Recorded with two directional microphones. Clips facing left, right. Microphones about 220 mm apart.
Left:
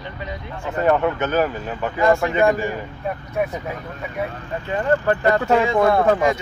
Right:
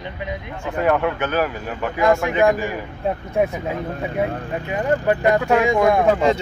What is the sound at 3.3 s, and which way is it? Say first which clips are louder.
Speech: right 3 dB; 25° right (ahead or behind).